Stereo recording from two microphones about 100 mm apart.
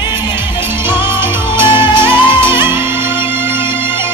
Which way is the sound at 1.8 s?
25° right (ahead or behind).